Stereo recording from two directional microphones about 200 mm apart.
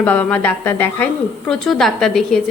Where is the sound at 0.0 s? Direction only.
10° left (ahead or behind).